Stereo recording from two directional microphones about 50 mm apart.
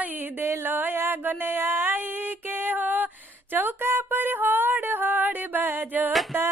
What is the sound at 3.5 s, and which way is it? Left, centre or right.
Music, right.